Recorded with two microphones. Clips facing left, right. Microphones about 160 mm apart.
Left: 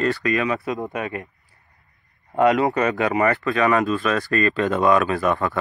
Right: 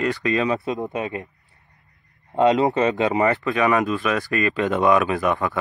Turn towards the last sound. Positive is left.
turn(degrees=-15)  # may be behind; listen again after turning